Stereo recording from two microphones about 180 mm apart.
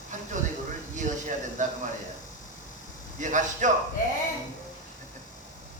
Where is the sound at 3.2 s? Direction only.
45° right (ahead or behind).